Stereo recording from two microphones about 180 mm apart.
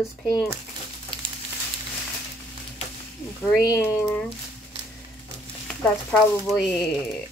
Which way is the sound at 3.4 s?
10° left (ahead or behind).